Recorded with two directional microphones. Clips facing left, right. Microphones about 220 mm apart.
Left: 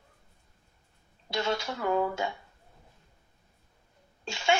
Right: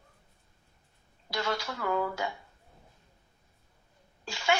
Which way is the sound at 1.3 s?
25° left (ahead or behind).